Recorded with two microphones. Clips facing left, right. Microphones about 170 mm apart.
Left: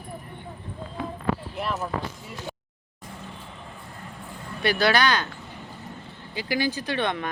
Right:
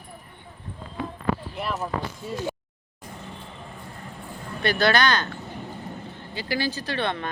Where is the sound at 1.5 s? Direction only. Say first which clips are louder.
Even; centre (ahead or behind).